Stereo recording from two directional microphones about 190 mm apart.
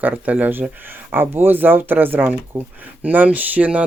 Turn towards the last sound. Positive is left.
turn(degrees=-10)  # may be behind; listen again after turning